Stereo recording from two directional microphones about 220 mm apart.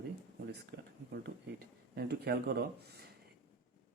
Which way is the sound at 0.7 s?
50° right (ahead or behind).